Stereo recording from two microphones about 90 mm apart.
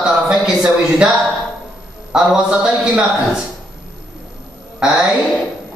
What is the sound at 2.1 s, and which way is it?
Speech, 10° right (ahead or behind).